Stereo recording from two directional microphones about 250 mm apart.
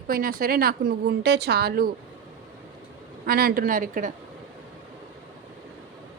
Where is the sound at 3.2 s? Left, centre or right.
Right.